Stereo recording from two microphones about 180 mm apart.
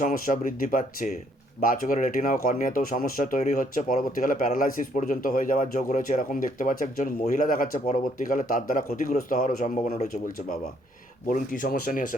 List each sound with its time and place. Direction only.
0.0 s speech: 50° left (ahead or behind)